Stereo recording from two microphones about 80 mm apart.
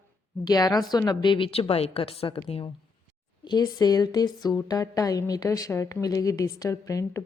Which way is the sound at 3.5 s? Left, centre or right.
Left.